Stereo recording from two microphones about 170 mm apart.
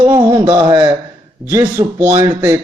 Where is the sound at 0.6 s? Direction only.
15° right (ahead or behind).